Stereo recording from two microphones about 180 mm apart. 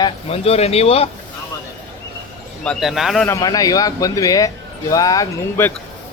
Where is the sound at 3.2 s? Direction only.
20° left (ahead or behind).